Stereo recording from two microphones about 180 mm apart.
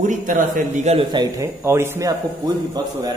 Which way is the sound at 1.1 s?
20° right (ahead or behind).